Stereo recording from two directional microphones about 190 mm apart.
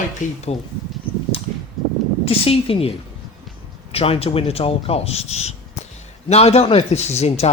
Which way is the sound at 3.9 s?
30° left (ahead or behind).